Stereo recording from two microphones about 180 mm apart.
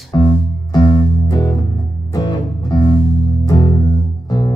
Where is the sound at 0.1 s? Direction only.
25° left (ahead or behind).